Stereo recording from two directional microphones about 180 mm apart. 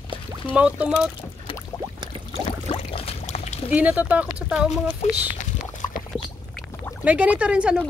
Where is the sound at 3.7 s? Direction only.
10° right (ahead or behind).